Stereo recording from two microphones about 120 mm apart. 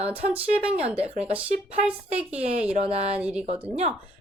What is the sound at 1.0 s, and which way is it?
Speech, 60° right (ahead or behind).